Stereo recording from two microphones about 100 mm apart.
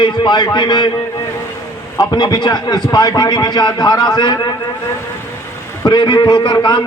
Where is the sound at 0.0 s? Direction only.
50° left (ahead or behind).